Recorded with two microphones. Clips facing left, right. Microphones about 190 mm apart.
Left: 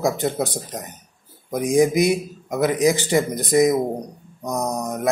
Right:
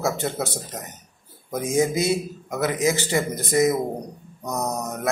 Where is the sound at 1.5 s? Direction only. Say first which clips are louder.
Left 4 dB; 15° left (ahead or behind).